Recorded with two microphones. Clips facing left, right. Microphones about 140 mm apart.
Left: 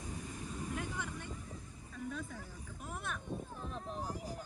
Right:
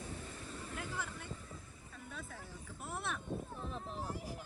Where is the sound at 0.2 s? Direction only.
15° left (ahead or behind).